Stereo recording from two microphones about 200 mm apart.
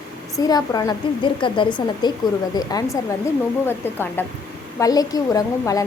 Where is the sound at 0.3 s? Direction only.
20° left (ahead or behind).